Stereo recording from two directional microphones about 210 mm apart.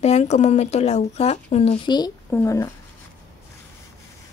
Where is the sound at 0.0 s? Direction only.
30° left (ahead or behind); by 2.7 s 15° left (ahead or behind).